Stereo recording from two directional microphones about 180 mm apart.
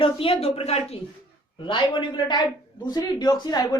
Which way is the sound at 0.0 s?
30° left (ahead or behind).